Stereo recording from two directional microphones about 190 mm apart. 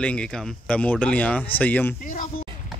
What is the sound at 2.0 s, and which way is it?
Speech, 45° left (ahead or behind).